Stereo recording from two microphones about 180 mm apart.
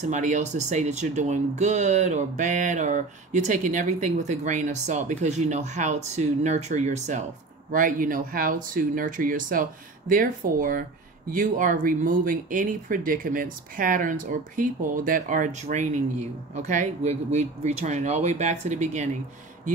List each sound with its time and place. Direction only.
0.0 s speech: 40° right (ahead or behind)